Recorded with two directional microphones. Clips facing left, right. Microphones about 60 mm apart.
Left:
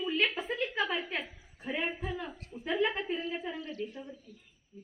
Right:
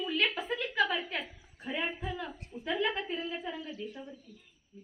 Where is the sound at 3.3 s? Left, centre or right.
Centre.